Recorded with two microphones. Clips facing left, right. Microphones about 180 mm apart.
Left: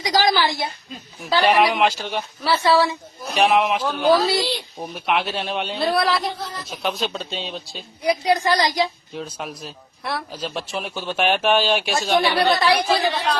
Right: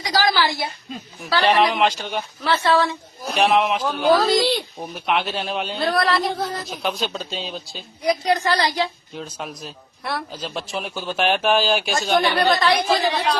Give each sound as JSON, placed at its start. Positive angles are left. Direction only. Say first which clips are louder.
{"t": 0.0, "sound": "a sound", "louder": "left 1 dB", "side_deg": 20}
{"t": 1.3, "sound": "a man's voice", "louder": "left 1 dB", "side_deg": 10}
{"t": 8.2, "sound": "a man's voice", "louder": "left 3 dB", "side_deg": 15}